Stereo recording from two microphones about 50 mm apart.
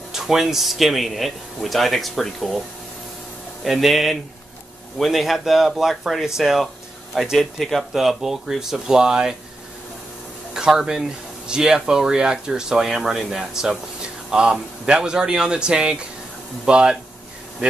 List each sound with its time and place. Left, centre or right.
0.1 s a man's voice: centre
3.6 s a man's voice: centre
10.5 s speech: centre